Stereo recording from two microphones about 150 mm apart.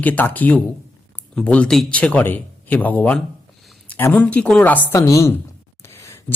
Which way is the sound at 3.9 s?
10° left (ahead or behind).